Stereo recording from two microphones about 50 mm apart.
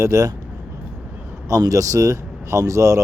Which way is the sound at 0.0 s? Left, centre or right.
Right.